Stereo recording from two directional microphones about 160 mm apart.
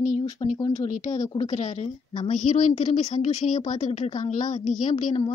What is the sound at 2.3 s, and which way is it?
A woman's voice, 50° left (ahead or behind).